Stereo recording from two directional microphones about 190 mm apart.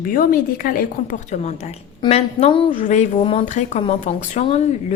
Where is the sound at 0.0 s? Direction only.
45° left (ahead or behind).